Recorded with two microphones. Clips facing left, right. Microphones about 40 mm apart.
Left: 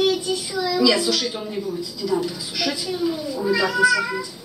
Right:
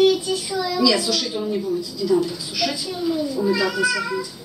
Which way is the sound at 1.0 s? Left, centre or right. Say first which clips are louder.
Even; left.